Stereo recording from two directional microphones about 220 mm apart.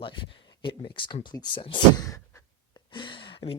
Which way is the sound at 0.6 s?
20° left (ahead or behind).